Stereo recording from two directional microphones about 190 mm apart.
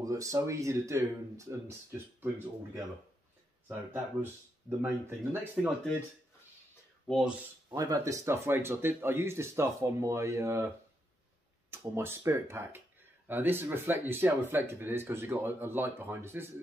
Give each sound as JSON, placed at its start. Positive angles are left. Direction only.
{"t": 0.0, "sound": "speech", "side_deg": -15}
{"t": 7.1, "sound": "speech", "side_deg": -5}
{"t": 7.7, "sound": "speech", "side_deg": -20}
{"t": 11.7, "sound": "speech", "side_deg": -15}